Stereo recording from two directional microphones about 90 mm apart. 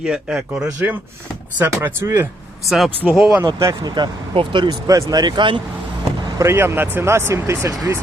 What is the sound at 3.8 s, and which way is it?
Speech, 55° right (ahead or behind).